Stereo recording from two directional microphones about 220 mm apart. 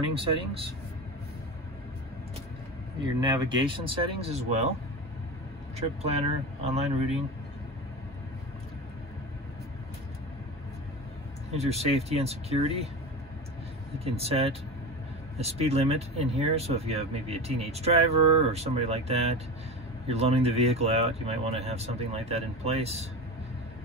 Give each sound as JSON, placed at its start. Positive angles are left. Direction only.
{"t": 3.2, "sound": "speech", "side_deg": -20}
{"t": 5.8, "sound": "speech", "side_deg": -30}
{"t": 11.5, "sound": "speech", "side_deg": -30}
{"t": 13.9, "sound": "speech", "side_deg": -25}